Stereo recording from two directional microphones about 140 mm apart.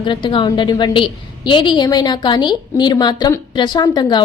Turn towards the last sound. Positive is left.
turn(degrees=30)  # may be behind; listen again after turning